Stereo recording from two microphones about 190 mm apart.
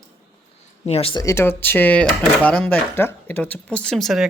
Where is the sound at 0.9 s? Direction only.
30° left (ahead or behind).